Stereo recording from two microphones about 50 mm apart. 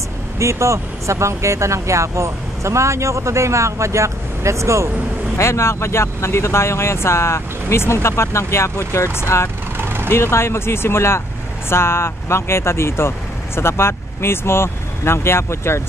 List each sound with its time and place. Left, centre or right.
0.4 s speech: right
5.4 s speech: left
9.8 s vehicle: right
10.1 s speech: left